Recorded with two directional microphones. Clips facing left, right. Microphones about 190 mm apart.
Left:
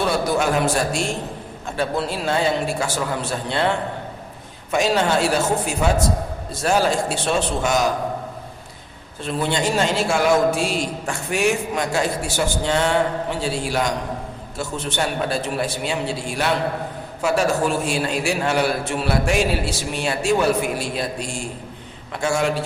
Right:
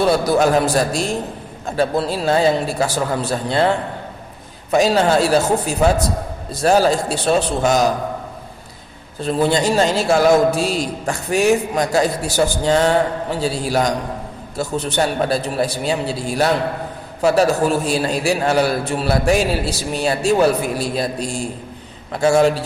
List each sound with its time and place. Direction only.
0.3 s a man's voice: 35° right (ahead or behind)
4.7 s a man's voice: 35° right (ahead or behind)
9.2 s a man's voice: 35° right (ahead or behind)